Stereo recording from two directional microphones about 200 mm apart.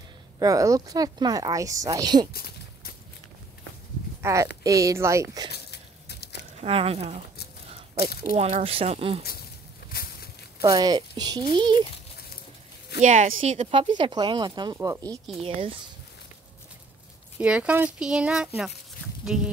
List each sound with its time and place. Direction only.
0.4 s a woman's voice: 15° right (ahead or behind)
2.3 s a sound: 50° left (ahead or behind)
4.2 s a woman's voice: 15° right (ahead or behind)
5.5 s a sound: 55° left (ahead or behind)
6.6 s speech: 30° right (ahead or behind)
8.4 s speech: 30° right (ahead or behind)
9.9 s a sound: 45° left (ahead or behind)
10.6 s speech: 20° right (ahead or behind)
13.0 s speech: 35° right (ahead or behind)
17.4 s speech: 5° right (ahead or behind)